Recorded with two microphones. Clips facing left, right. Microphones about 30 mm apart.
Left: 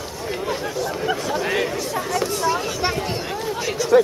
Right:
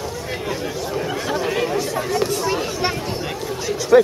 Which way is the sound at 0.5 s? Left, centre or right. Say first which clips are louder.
Even; centre.